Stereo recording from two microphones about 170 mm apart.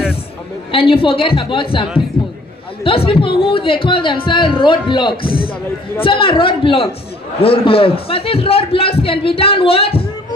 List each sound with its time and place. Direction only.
0.7 s speech: 30° left (ahead or behind)